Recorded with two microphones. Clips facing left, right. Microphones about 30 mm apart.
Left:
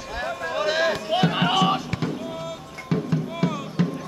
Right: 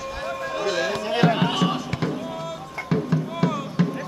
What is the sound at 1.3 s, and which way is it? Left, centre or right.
Music, centre.